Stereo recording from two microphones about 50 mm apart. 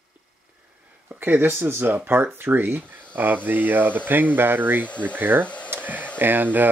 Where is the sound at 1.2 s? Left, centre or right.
Right.